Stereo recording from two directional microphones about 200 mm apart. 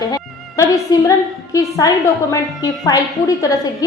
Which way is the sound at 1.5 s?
15° left (ahead or behind).